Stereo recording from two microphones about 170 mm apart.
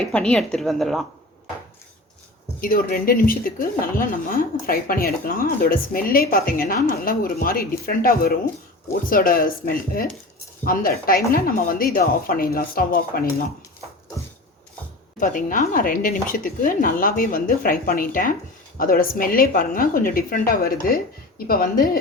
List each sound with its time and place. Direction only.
0.0 s speech: 5° left (ahead or behind)
2.6 s speech: 55° left (ahead or behind)
15.2 s speech: 50° left (ahead or behind)